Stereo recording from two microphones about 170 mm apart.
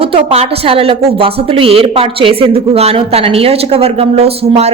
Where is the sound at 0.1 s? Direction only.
35° right (ahead or behind).